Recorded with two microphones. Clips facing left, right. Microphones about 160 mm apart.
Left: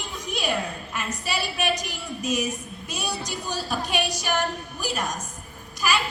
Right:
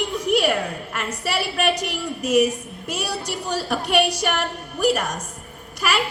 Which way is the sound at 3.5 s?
65° right (ahead or behind).